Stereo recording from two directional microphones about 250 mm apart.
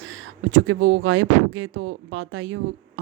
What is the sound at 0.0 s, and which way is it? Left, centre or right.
Speech, right.